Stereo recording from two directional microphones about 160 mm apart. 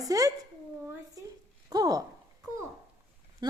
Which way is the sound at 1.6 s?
25° right (ahead or behind).